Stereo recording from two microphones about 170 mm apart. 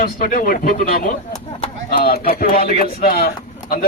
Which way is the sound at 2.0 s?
60° left (ahead or behind).